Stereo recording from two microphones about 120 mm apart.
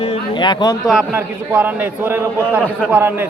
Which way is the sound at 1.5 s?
15° right (ahead or behind).